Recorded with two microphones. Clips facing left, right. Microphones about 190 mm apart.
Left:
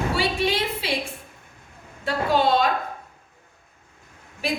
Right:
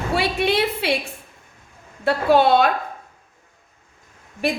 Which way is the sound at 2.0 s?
65° right (ahead or behind).